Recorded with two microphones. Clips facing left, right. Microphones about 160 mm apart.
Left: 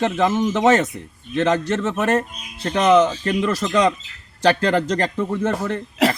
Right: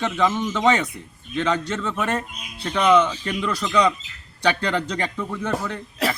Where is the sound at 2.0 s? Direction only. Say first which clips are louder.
Left 5 dB; 40° left (ahead or behind).